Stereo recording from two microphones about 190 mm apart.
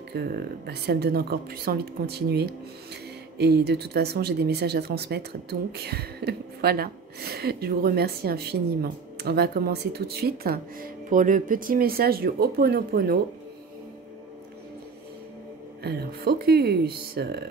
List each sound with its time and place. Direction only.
0.1 s speech: 55° right (ahead or behind)
15.8 s speech: 55° right (ahead or behind)